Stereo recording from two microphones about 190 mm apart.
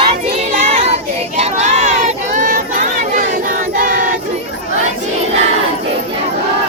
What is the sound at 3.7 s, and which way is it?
Choir, 45° right (ahead or behind).